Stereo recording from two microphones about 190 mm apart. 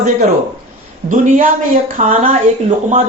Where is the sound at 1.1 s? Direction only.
40° right (ahead or behind).